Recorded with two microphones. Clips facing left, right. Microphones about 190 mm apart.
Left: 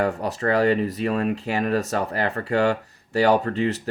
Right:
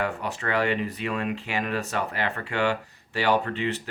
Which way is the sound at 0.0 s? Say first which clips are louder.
Left 6 dB; 40° left (ahead or behind).